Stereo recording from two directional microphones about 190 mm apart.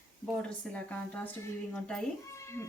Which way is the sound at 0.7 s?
5° left (ahead or behind).